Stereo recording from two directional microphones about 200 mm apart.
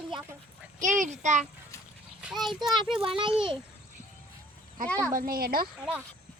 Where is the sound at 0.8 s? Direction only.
40° right (ahead or behind).